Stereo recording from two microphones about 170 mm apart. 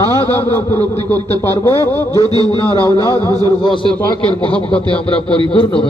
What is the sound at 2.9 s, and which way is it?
A man's voice, 25° left (ahead or behind).